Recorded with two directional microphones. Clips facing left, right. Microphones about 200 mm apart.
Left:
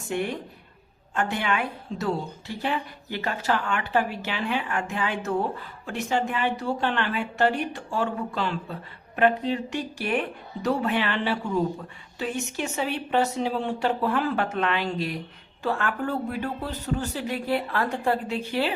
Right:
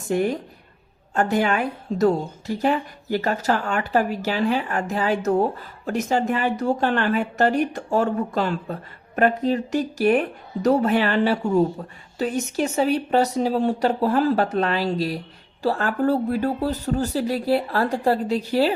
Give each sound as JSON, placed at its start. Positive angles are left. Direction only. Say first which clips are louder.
{"t": 0.1, "sound": "a woman's voice", "louder": "right 6 dB", "side_deg": -40}